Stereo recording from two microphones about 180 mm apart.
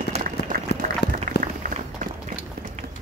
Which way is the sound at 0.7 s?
65° left (ahead or behind).